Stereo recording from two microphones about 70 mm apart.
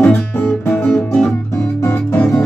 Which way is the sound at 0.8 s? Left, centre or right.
Centre.